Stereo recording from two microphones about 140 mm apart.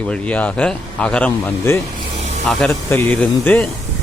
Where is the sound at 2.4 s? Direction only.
Centre (ahead or behind).